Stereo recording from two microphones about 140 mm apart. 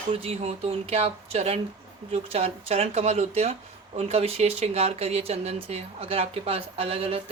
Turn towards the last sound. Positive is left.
turn(degrees=-45)  # may be behind; listen again after turning